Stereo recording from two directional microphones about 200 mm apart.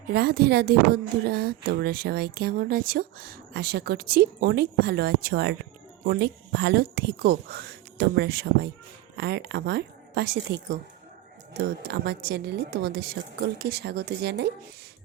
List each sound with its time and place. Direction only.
0.1 s speech: 50° right (ahead or behind)
11.8 s speech: 55° right (ahead or behind)